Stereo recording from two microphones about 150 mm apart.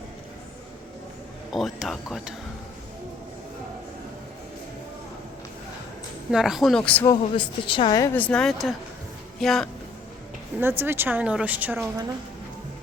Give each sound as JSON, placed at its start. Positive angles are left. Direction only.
{"t": 1.5, "sound": "speech", "side_deg": 0}
{"t": 6.3, "sound": "speech", "side_deg": 0}
{"t": 7.0, "sound": "speech", "side_deg": 30}
{"t": 8.0, "sound": "speech", "side_deg": 10}
{"t": 10.6, "sound": "speech", "side_deg": -15}